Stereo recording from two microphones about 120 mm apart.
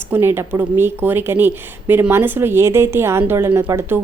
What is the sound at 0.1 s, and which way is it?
Speech, 20° right (ahead or behind).